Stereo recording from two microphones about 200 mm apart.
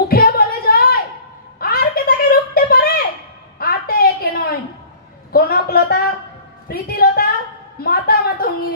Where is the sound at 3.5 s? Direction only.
50° left (ahead or behind).